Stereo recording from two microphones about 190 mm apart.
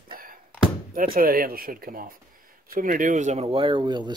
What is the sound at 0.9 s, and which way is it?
Speech, 50° right (ahead or behind).